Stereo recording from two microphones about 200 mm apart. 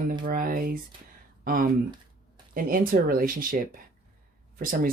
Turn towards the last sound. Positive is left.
turn(degrees=-45)  # may be behind; listen again after turning